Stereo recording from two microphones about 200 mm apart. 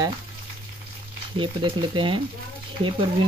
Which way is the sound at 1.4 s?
25° right (ahead or behind).